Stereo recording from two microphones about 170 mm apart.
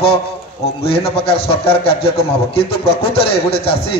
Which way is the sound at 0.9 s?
35° left (ahead or behind).